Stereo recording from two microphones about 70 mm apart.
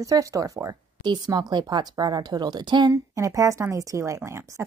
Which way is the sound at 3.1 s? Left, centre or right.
Right.